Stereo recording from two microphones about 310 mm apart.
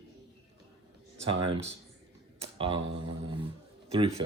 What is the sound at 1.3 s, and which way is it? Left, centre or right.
Speech, centre.